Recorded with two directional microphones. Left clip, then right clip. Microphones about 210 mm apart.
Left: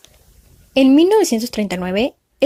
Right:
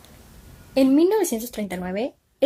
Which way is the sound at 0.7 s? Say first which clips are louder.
Left 6 dB; 35° left (ahead or behind).